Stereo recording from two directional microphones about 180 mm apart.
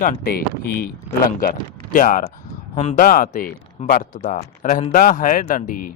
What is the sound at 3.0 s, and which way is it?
Speech, 50° left (ahead or behind).